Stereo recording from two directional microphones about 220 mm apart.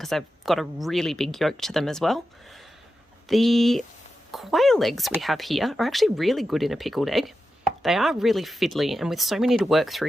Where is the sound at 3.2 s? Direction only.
Centre (ahead or behind).